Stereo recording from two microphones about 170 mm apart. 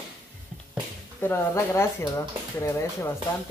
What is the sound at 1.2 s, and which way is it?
Speech, 15° left (ahead or behind).